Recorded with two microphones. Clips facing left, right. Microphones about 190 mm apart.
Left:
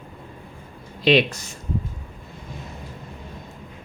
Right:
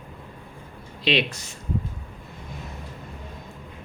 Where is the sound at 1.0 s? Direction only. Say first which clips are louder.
Left 6 dB; 45° left (ahead or behind).